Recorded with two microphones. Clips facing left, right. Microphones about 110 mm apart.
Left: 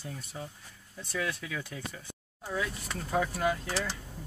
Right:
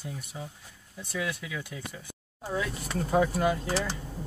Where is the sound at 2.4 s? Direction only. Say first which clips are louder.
Right 2 dB; 25° right (ahead or behind).